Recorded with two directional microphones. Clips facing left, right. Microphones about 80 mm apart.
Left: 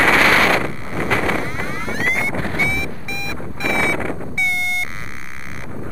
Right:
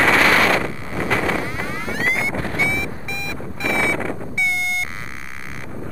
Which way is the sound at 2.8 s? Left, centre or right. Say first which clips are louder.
Even; centre.